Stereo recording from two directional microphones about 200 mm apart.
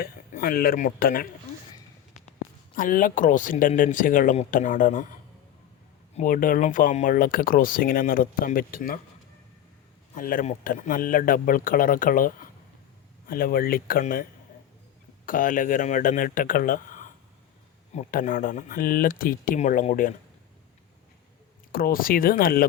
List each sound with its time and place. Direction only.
0.0 s speech: 45° left (ahead or behind)
2.7 s speech: 40° left (ahead or behind)
6.1 s speech: 45° left (ahead or behind)
10.2 s speech: 40° left (ahead or behind)
15.3 s speech: 40° left (ahead or behind)
21.7 s speech: 45° left (ahead or behind)